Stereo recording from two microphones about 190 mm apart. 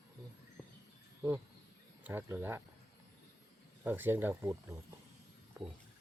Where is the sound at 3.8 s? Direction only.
10° right (ahead or behind).